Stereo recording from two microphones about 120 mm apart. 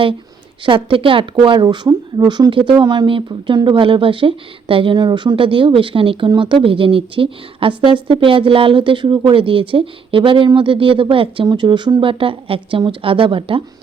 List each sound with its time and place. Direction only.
0.6 s speech: 45° right (ahead or behind)